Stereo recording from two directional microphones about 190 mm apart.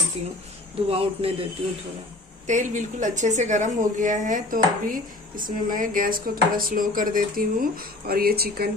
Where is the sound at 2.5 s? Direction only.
40° right (ahead or behind).